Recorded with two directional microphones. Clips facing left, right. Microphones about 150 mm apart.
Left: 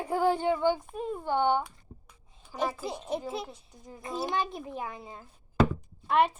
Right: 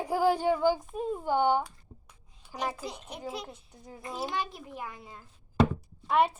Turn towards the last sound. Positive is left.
turn(degrees=-10)  # may be behind; listen again after turning